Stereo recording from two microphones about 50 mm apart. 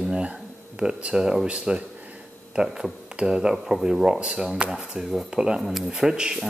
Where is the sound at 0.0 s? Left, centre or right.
Centre.